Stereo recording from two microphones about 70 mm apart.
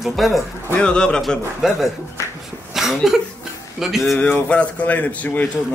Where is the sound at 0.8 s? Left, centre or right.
Centre.